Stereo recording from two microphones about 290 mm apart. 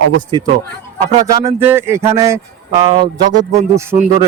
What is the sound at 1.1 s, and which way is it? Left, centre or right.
Speech, centre.